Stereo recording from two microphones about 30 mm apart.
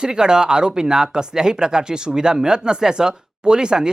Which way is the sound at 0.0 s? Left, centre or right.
Right.